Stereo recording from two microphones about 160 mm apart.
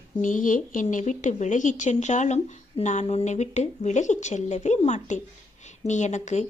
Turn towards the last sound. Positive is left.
turn(degrees=45)  # may be behind; listen again after turning